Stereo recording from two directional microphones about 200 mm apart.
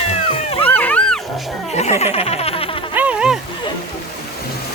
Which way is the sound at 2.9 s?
5° right (ahead or behind).